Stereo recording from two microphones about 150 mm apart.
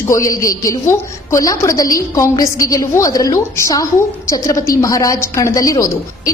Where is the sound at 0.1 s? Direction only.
20° left (ahead or behind).